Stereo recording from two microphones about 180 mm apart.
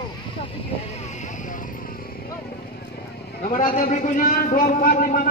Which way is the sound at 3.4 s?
45° left (ahead or behind).